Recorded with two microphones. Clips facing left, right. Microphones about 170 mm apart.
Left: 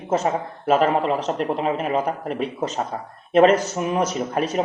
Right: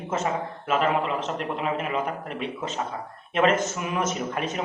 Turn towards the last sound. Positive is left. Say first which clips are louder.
# left 6 dB
turn(degrees=35)  # may be behind; listen again after turning